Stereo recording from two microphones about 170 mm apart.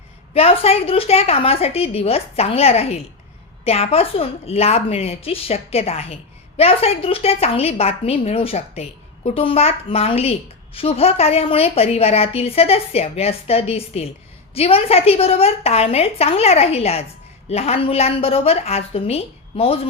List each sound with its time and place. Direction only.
0.3 s a woman's voice: 35° left (ahead or behind)